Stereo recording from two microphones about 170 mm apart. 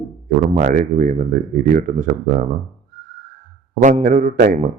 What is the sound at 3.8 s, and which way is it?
Speech, 50° right (ahead or behind).